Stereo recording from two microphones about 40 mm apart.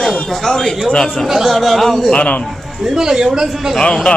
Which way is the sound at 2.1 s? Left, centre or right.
Left.